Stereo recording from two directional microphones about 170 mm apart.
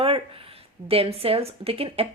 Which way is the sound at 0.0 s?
35° right (ahead or behind).